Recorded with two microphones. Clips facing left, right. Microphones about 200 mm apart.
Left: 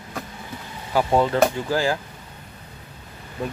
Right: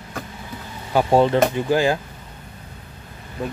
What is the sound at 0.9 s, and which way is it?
Speech, 25° right (ahead or behind).